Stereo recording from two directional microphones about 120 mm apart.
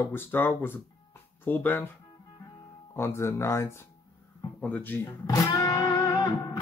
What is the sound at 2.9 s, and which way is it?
Speech, 20° left (ahead or behind).